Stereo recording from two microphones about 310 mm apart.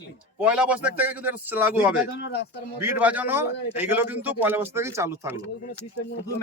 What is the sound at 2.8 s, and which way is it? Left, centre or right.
Speech, centre.